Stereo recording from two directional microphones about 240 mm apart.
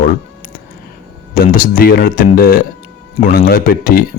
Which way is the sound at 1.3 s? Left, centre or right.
Left.